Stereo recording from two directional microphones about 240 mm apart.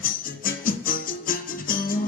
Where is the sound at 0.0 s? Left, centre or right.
Left.